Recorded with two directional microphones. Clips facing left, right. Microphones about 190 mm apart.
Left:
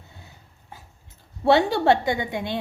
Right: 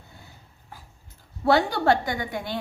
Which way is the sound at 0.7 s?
20° left (ahead or behind).